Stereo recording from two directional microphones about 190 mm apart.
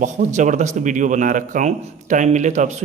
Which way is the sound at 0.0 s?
40° right (ahead or behind).